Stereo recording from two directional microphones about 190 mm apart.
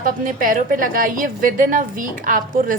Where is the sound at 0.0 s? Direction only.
45° right (ahead or behind).